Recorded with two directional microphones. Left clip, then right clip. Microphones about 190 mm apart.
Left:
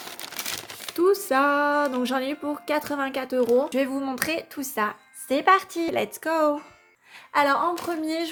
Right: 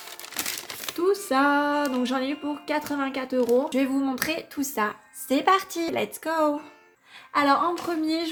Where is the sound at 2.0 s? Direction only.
35° left (ahead or behind).